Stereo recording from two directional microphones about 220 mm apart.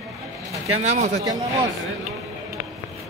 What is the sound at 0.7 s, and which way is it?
Speech, 30° right (ahead or behind).